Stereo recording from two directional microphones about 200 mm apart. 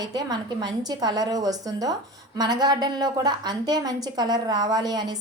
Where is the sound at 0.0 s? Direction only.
20° right (ahead or behind).